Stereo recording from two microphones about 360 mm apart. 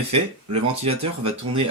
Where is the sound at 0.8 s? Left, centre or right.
Centre.